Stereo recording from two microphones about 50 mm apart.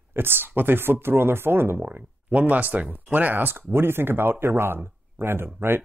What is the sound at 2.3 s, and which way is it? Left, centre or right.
Speech, right.